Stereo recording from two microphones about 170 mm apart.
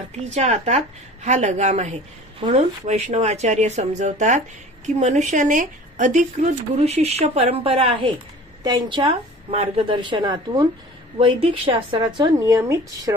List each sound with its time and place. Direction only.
0.3 s a woman's voice: 40° right (ahead or behind); by 13.1 s 20° right (ahead or behind)